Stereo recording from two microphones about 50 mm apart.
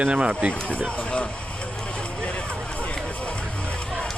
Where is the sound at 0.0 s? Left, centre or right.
Right.